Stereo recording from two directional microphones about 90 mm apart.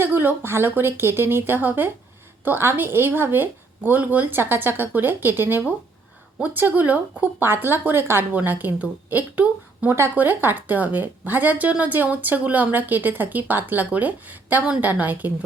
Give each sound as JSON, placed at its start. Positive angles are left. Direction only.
{"t": 0.0, "sound": "speech", "side_deg": -25}